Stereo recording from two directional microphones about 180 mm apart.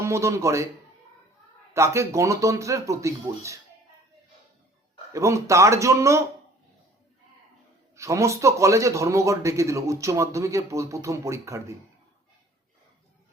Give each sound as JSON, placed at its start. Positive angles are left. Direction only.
{"t": 0.0, "sound": "speech", "side_deg": -15}
{"t": 1.7, "sound": "speech", "side_deg": -15}
{"t": 5.1, "sound": "speech", "side_deg": -15}
{"t": 7.9, "sound": "speech", "side_deg": -15}